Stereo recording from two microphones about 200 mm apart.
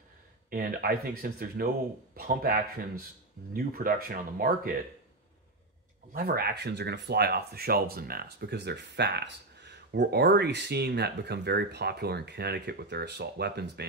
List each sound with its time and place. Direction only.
0.5 s speech: 45° right (ahead or behind)
6.1 s speech: 50° right (ahead or behind)